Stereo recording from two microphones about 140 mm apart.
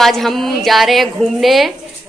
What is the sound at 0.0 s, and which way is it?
A woman's voice, centre (ahead or behind).